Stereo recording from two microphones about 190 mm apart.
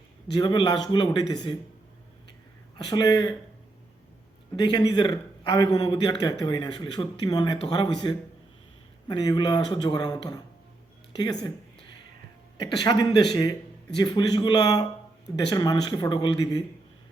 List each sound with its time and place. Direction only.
0.3 s a man's voice: 25° left (ahead or behind)
2.7 s a man's voice: 25° left (ahead or behind)
4.5 s a man's voice: 20° left (ahead or behind)
12.6 s a man's voice: 25° left (ahead or behind)